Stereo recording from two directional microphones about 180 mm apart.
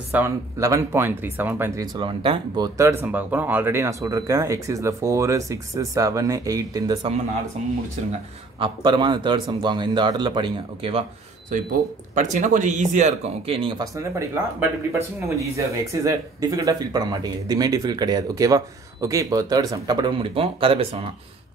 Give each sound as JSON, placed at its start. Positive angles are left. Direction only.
{"t": 0.1, "sound": "speech", "side_deg": -15}
{"t": 2.0, "sound": "speech", "side_deg": -30}
{"t": 8.5, "sound": "speech", "side_deg": -25}
{"t": 12.2, "sound": "speech", "side_deg": -45}
{"t": 13.9, "sound": "speech", "side_deg": -15}